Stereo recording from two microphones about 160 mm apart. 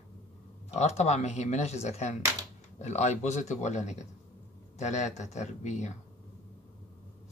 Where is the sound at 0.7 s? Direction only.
45° left (ahead or behind).